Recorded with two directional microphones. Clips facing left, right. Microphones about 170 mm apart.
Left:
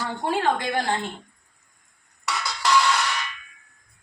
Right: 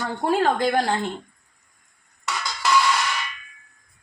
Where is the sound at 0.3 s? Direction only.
40° right (ahead or behind).